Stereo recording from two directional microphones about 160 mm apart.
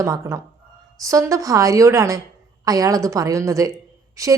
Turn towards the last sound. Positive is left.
turn(degrees=-20)  # may be behind; listen again after turning